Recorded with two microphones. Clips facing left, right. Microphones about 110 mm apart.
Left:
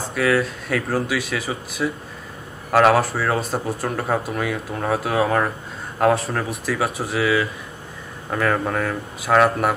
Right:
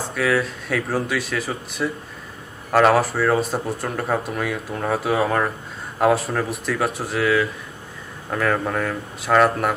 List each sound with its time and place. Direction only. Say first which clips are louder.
0.0 s speech: left 1 dB; centre (ahead or behind)